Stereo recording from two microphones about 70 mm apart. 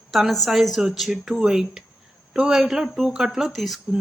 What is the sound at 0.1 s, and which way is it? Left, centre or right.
A woman's voice, centre.